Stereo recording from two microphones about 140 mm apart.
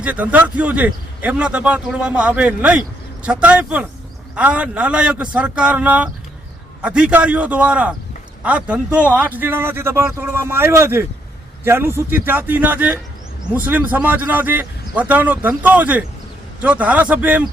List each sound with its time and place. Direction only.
0.0 s a man's voice: 10° right (ahead or behind)